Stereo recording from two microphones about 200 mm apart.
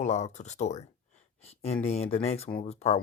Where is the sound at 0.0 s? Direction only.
35° left (ahead or behind).